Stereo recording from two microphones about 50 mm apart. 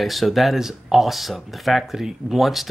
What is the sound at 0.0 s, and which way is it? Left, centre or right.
Speech, centre.